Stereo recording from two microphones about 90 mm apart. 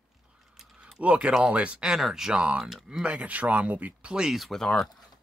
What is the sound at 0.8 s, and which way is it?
Speech, 10° right (ahead or behind).